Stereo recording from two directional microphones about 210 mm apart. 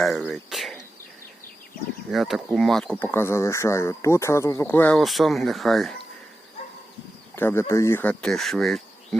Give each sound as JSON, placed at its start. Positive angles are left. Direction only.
{"t": 0.0, "sound": "speech", "side_deg": 0}
{"t": 0.5, "sound": "cricket", "side_deg": 0}
{"t": 2.0, "sound": "speech", "side_deg": 0}
{"t": 7.3, "sound": "speech", "side_deg": 10}